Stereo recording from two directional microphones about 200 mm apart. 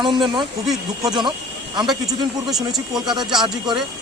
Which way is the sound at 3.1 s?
20° right (ahead or behind).